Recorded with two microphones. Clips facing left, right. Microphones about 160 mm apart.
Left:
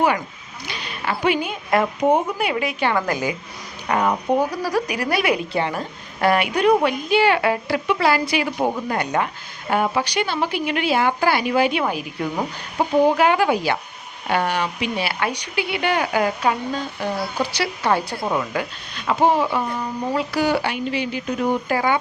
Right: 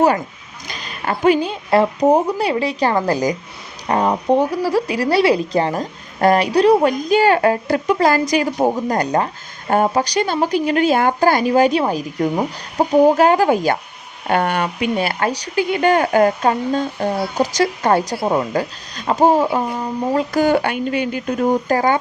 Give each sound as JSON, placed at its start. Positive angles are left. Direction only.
{"t": 0.7, "sound": "a woman's voice", "side_deg": -40}